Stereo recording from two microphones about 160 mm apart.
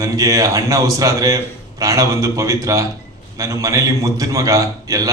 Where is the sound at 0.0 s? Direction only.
20° right (ahead or behind).